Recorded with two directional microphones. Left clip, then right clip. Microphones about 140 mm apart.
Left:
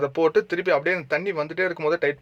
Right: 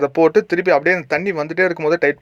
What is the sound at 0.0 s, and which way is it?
Speech, 30° right (ahead or behind).